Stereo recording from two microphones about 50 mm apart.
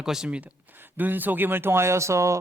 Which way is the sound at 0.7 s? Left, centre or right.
Right.